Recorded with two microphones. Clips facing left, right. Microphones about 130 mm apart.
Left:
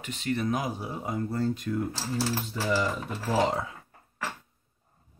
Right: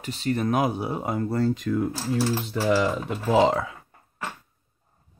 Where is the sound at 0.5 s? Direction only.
65° right (ahead or behind); by 3.7 s 90° right.